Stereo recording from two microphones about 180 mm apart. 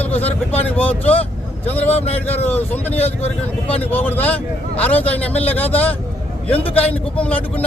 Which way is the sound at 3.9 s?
10° left (ahead or behind).